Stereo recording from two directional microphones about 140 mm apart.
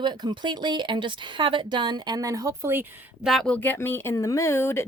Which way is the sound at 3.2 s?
5° left (ahead or behind).